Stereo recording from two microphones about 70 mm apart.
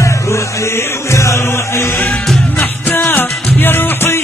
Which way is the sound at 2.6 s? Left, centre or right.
Left.